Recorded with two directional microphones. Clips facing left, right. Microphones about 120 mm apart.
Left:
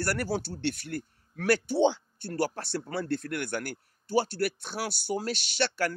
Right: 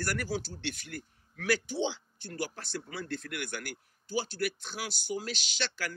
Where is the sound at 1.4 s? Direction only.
60° left (ahead or behind).